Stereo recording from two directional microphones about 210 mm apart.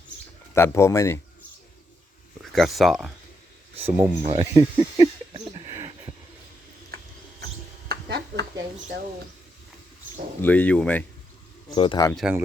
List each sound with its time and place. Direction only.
0.5 s speech: 10° left (ahead or behind)
2.4 s speech: centre (ahead or behind)
4.2 s speech: 30° right (ahead or behind)
4.5 s a sound: 20° right (ahead or behind)
7.9 s a sound: 55° right (ahead or behind)
10.4 s speech: 5° left (ahead or behind)
11.7 s speech: 20° left (ahead or behind)
12.1 s speech: 5° right (ahead or behind)